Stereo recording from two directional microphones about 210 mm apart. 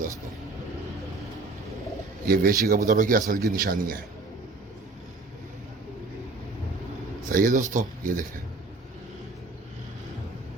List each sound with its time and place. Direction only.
2.2 s a man's voice: 45° right (ahead or behind)
7.3 s a man's voice: 40° right (ahead or behind)